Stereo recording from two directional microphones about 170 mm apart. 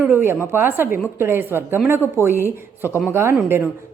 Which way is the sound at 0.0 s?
10° right (ahead or behind).